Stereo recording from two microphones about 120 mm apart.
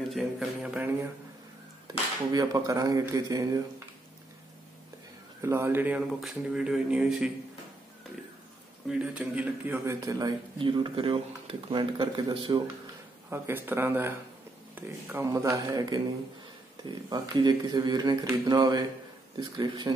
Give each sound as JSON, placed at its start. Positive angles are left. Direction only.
{"t": 0.1, "sound": "a man's voice", "side_deg": -5}
{"t": 2.3, "sound": "a man's voice", "side_deg": -30}
{"t": 5.4, "sound": "a man's voice", "side_deg": -20}
{"t": 8.8, "sound": "a man's voice", "side_deg": -10}
{"t": 9.8, "sound": "a man's voice", "side_deg": -25}
{"t": 10.6, "sound": "speech", "side_deg": -40}
{"t": 13.3, "sound": "a man's voice", "side_deg": -20}
{"t": 15.2, "sound": "a man's voice", "side_deg": -25}